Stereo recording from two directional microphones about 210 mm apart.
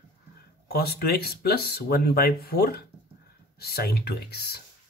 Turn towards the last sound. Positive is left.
turn(degrees=50)  # may be behind; listen again after turning